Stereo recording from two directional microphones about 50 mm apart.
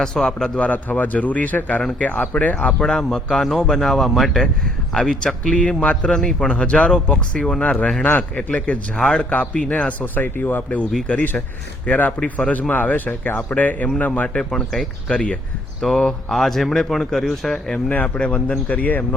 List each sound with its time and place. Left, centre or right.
0.0 s speech: centre
0.6 s a man's voice: left
2.6 s speech: centre
6.1 s speech: centre
8.4 s speech: left
10.0 s a man's voice: left
14.5 s speech: centre
15.1 s speech: left
16.3 s speech: centre
17.8 s speech: left